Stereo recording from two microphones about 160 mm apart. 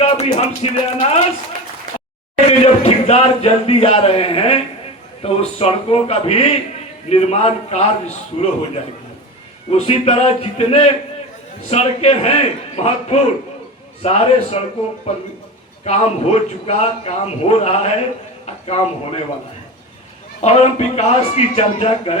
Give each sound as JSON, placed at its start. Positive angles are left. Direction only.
{"t": 0.0, "sound": "speech", "side_deg": 45}
{"t": 2.5, "sound": "a man's voice", "side_deg": 40}
{"t": 20.4, "sound": "speech", "side_deg": 45}